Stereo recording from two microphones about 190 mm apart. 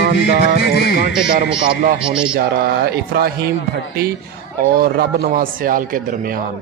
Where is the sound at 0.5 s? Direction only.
60° left (ahead or behind).